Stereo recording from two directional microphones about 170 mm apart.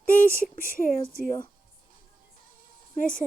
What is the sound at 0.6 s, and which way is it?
Speech, 55° left (ahead or behind).